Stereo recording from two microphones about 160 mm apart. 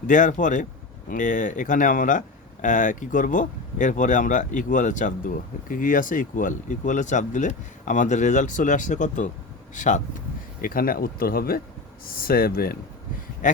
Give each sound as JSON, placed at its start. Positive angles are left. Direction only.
{"t": 0.1, "sound": "speech", "side_deg": 55}
{"t": 10.6, "sound": "speech", "side_deg": 65}